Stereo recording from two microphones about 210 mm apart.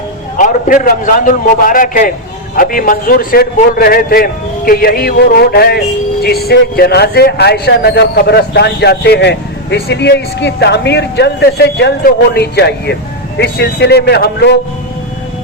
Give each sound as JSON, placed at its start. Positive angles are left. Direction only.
{"t": 0.3, "sound": "a man's voice", "side_deg": 40}